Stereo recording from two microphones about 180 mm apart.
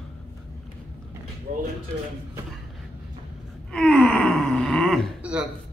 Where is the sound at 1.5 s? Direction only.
45° right (ahead or behind).